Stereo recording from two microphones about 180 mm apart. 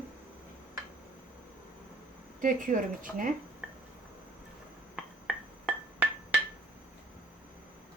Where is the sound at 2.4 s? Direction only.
50° right (ahead or behind).